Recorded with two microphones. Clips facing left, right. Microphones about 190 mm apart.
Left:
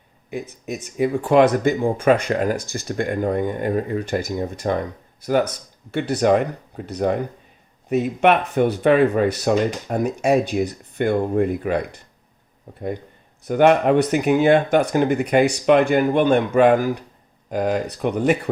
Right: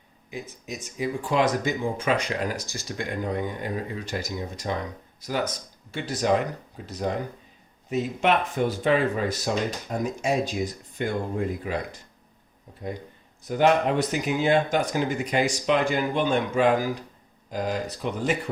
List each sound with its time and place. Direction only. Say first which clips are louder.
0.3 s speech: left 7 dB; 60° left (ahead or behind)
13.4 s speech: left 6 dB; 60° left (ahead or behind)